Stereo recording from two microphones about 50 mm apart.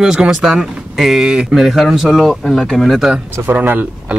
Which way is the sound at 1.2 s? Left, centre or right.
Centre.